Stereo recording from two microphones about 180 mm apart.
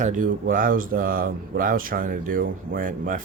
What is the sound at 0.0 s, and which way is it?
Speech, 45° right (ahead or behind).